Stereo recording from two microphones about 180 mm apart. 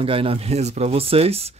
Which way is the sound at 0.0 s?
30° right (ahead or behind).